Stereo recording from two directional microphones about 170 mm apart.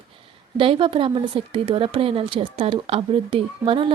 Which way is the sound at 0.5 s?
30° right (ahead or behind).